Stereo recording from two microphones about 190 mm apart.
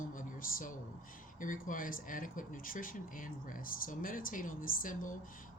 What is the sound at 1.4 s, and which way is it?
Speech, 45° left (ahead or behind).